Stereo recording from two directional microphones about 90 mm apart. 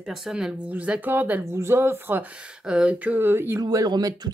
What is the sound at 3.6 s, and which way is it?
Speech, 45° right (ahead or behind).